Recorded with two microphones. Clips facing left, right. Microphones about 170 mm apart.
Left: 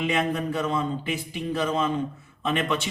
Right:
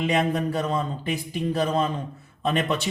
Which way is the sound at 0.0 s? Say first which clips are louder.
Right 2 dB; 40° right (ahead or behind).